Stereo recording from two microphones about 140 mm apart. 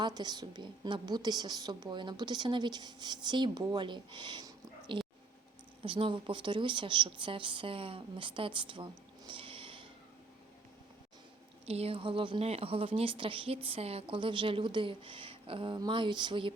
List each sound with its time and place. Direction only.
0.0 s a woman's voice: 30° right (ahead or behind)
11.6 s a woman's voice: 45° right (ahead or behind)